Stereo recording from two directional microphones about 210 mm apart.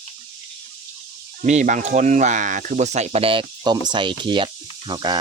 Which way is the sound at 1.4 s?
35° right (ahead or behind).